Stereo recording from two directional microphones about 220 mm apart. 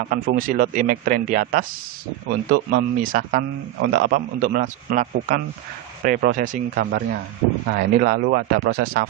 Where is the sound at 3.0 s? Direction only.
40° right (ahead or behind).